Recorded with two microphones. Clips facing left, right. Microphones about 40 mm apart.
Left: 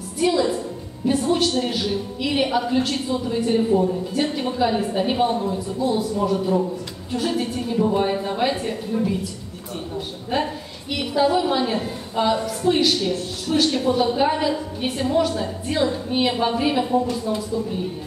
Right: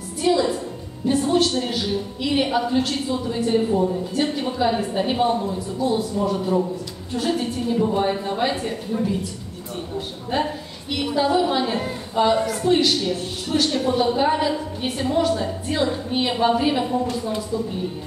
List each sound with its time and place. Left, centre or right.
0.2 s music: centre
1.0 s a woman's voice: centre
3.8 s a man's voice: centre
11.3 s a woman's voice: centre
17.1 s speech: right